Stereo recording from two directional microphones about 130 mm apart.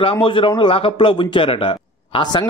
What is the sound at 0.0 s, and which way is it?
A man's voice, 40° left (ahead or behind).